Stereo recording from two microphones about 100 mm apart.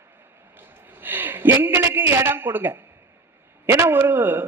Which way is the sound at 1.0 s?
20° right (ahead or behind).